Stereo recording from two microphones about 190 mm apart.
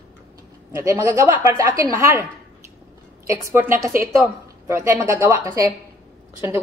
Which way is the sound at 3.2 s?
15° right (ahead or behind).